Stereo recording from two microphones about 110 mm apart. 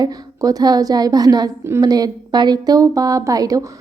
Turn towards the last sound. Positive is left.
turn(degrees=-35)  # may be behind; listen again after turning